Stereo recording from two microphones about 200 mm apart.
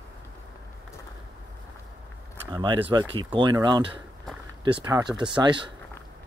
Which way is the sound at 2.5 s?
25° right (ahead or behind).